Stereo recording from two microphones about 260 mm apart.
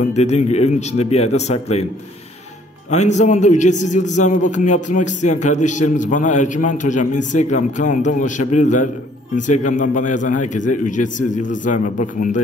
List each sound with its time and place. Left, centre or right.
0.1 s a man's voice: left
2.9 s a man's voice: left